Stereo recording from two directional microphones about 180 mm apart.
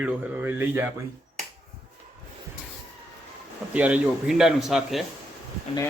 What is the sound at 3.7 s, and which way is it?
Speech, 10° right (ahead or behind).